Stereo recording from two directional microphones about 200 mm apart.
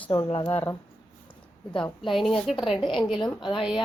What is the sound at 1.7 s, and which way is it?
Speech, 25° left (ahead or behind).